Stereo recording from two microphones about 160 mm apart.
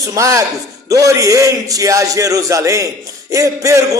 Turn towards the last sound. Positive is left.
turn(degrees=-20)  # may be behind; listen again after turning